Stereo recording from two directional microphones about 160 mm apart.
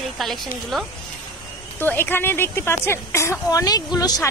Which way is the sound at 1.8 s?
15° left (ahead or behind).